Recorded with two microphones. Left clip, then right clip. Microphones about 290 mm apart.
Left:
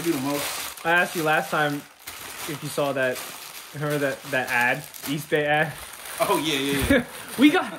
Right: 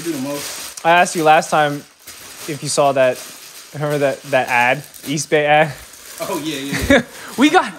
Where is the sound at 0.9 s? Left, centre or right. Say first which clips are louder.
Right 10 dB; centre.